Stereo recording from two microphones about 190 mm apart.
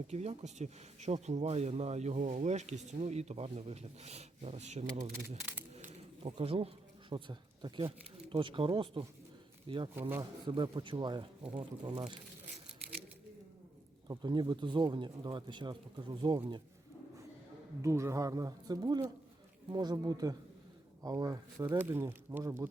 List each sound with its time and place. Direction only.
0.1 s speech: 35° right (ahead or behind)
5.9 s speech: 30° right (ahead or behind)
9.9 s speech: 10° right (ahead or behind)
10.4 s speech: 25° right (ahead or behind)
14.1 s speech: 25° right (ahead or behind)
17.8 s speech: 15° right (ahead or behind)